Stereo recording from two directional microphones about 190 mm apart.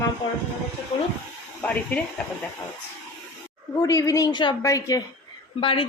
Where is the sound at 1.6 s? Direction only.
10° left (ahead or behind).